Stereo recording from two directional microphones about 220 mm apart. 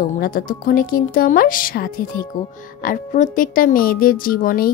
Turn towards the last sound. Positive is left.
turn(degrees=40)  # may be behind; listen again after turning